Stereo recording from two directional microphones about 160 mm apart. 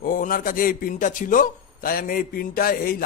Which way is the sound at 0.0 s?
60° left (ahead or behind).